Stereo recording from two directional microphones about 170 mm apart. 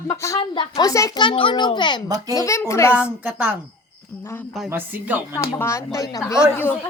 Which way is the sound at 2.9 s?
10° right (ahead or behind).